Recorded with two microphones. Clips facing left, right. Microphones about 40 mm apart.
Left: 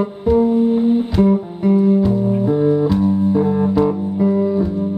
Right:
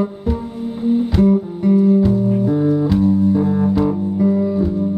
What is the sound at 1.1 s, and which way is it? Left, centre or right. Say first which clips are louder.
Music: even; centre.